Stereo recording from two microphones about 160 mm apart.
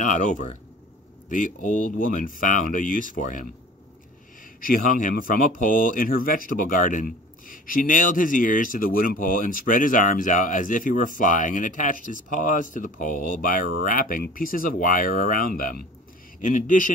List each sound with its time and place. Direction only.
0.0 s speech: 50° left (ahead or behind)
4.6 s speech: 60° left (ahead or behind)